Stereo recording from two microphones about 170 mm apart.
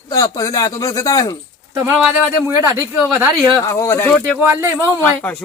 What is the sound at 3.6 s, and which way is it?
Speech, 15° left (ahead or behind).